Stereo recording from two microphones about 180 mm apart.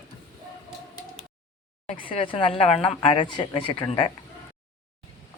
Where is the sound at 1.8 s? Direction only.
30° left (ahead or behind).